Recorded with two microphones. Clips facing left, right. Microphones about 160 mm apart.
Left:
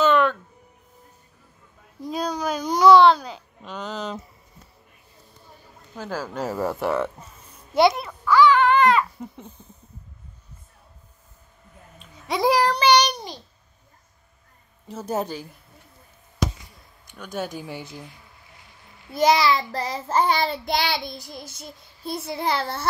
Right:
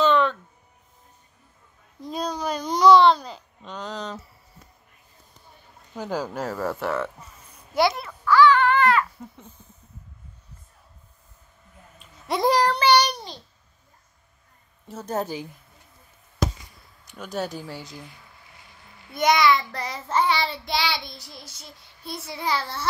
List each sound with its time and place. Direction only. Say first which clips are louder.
0.0 s a sound: left 1 dB; 5° left (ahead or behind)
2.0 s speech: left 2 dB; centre (ahead or behind)
5.9 s speech: right 2 dB; 15° right (ahead or behind)
6.4 s speech: left 2 dB; 15° left (ahead or behind)
7.7 s babbling: left 4 dB; 20° left (ahead or behind)
12.0 s a child's voice: left 1 dB; centre (ahead or behind)
14.9 s speech: left 2 dB; centre (ahead or behind)
17.1 s speech: right 1 dB; centre (ahead or behind)
17.6 s speech: left 2 dB; 15° left (ahead or behind)
19.1 s a child's voice: left 1 dB; 30° left (ahead or behind)
20.2 s child singing: left 2 dB; 45° left (ahead or behind)